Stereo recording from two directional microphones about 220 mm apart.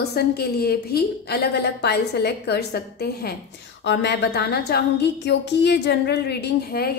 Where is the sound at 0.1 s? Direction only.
45° left (ahead or behind).